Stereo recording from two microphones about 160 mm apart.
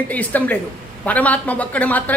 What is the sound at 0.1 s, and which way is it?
A woman's voice, 10° left (ahead or behind).